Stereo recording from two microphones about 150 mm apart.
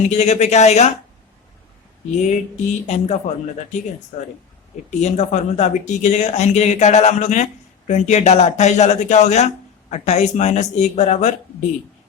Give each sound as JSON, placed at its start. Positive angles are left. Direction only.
{"t": 0.1, "sound": "speech", "side_deg": 50}
{"t": 2.2, "sound": "speech", "side_deg": 50}